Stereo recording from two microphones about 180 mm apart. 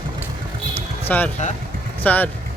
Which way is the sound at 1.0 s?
10° left (ahead or behind).